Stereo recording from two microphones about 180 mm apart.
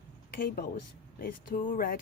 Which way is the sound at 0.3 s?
60° left (ahead or behind).